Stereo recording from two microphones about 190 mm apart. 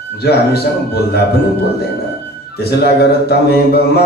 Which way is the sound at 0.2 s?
55° left (ahead or behind).